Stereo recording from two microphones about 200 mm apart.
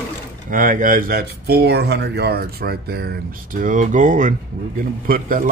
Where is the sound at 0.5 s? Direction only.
40° right (ahead or behind).